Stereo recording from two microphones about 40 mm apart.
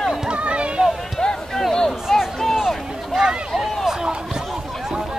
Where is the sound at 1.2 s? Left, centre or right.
Centre.